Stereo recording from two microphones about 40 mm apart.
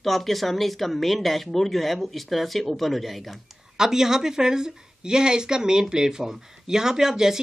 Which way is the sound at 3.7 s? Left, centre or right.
Centre.